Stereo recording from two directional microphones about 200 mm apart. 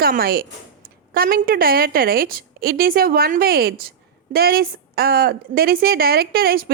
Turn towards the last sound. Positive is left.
turn(degrees=-50)  # may be behind; listen again after turning